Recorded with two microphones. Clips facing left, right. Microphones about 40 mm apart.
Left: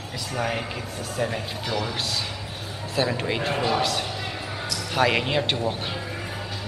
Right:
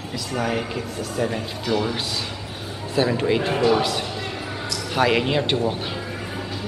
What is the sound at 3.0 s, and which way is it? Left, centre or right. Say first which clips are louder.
A man's voice: right 5 dB; centre.